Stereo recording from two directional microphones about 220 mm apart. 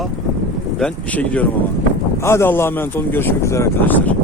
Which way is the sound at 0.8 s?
5° left (ahead or behind).